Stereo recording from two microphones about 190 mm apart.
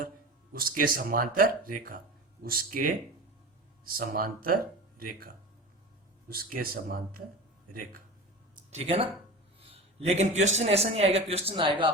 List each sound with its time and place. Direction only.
0.5 s speech: 50° right (ahead or behind)
3.9 s speech: 50° right (ahead or behind)
8.5 s a sound: 35° right (ahead or behind)
9.6 s a man's voice: 30° right (ahead or behind)